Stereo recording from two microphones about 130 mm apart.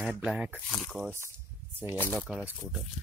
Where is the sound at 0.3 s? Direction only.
10° right (ahead or behind).